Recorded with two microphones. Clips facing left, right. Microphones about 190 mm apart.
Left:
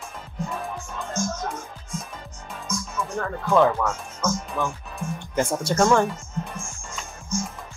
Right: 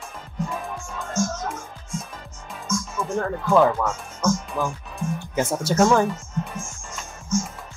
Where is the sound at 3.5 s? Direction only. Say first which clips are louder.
Right 1 dB; 5° right (ahead or behind).